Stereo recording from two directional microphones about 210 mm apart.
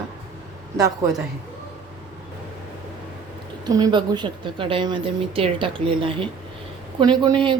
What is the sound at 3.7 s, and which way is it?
A woman's voice, 15° right (ahead or behind).